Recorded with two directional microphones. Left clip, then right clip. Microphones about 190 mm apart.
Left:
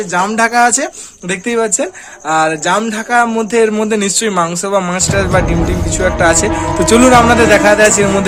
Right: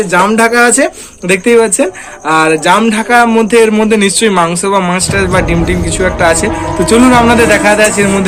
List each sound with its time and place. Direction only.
0.1 s speech: 50° left (ahead or behind)